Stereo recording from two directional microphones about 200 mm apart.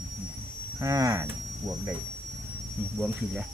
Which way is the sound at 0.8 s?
15° right (ahead or behind).